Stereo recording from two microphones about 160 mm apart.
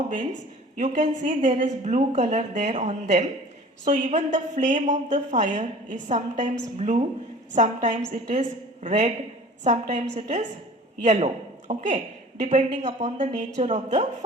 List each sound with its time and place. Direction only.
0.8 s a woman's voice: 50° right (ahead or behind)
12.4 s a woman's voice: 45° right (ahead or behind)